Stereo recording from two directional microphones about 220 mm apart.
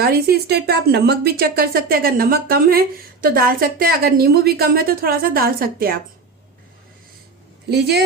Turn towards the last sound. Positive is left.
turn(degrees=-50)  # may be behind; listen again after turning